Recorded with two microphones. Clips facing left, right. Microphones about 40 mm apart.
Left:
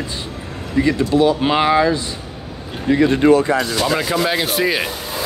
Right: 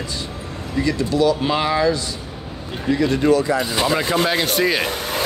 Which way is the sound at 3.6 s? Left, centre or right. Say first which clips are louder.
Left 2 dB; centre.